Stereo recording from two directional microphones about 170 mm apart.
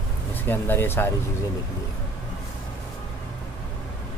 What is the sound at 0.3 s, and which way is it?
Speech, 10° left (ahead or behind).